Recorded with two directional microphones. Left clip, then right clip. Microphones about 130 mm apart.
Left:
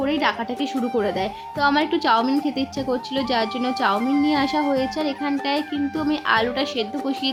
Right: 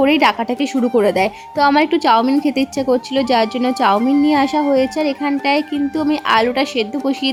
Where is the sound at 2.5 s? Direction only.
45° right (ahead or behind).